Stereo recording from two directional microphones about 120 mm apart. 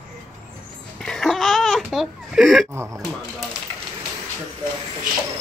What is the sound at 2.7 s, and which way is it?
Speech, 20° right (ahead or behind).